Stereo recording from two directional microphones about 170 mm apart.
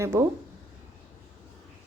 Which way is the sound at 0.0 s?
15° right (ahead or behind).